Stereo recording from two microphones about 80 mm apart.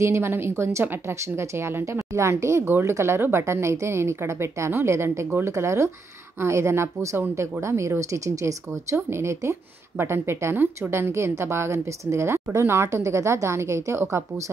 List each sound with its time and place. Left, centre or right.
0.0 s speech: right